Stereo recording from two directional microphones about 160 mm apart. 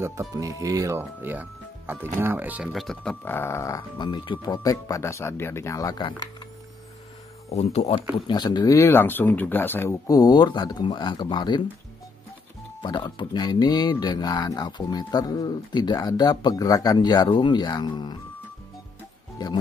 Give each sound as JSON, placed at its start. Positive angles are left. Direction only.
{"t": 0.0, "sound": "speech", "side_deg": -20}
{"t": 7.4, "sound": "speech", "side_deg": 40}
{"t": 8.3, "sound": "speech", "side_deg": 25}
{"t": 12.8, "sound": "speech", "side_deg": 30}
{"t": 19.3, "sound": "speech", "side_deg": 25}